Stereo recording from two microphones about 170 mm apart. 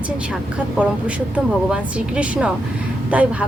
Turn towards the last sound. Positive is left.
turn(degrees=-10)  # may be behind; listen again after turning